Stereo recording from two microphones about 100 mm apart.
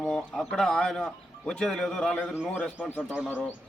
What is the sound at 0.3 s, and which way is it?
A man's voice, 5° left (ahead or behind).